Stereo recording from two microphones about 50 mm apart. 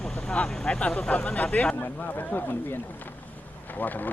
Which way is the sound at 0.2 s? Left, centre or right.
Left.